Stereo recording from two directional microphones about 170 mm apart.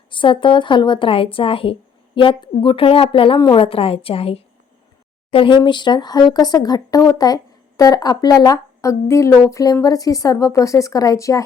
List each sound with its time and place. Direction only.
0.1 s a woman's voice: 30° left (ahead or behind)